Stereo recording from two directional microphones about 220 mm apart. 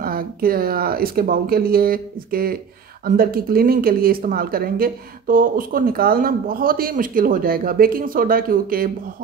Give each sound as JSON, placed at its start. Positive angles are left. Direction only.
{"t": 0.0, "sound": "a woman's voice", "side_deg": -40}